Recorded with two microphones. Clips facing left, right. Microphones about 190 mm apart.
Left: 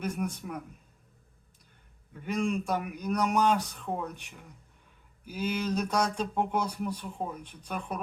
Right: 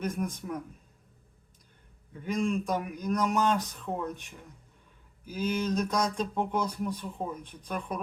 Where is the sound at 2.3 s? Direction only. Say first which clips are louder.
Even; 10° left (ahead or behind).